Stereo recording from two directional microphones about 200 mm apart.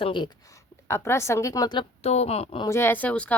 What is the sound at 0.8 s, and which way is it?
Speech, 15° left (ahead or behind).